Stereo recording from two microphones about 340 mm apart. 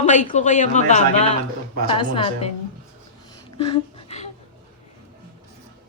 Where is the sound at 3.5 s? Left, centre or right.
Centre.